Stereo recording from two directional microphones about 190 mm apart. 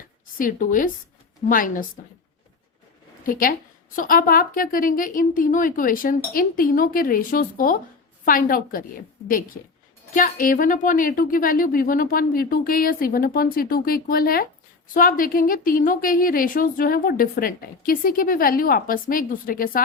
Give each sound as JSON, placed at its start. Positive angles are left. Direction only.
{"t": 0.3, "sound": "a woman's voice", "side_deg": 45}
{"t": 3.2, "sound": "a woman's voice", "side_deg": 45}
{"t": 10.2, "sound": "a woman's voice", "side_deg": 45}